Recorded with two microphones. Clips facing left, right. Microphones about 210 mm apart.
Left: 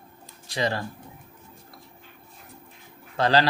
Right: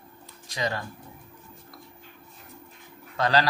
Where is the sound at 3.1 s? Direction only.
30° left (ahead or behind).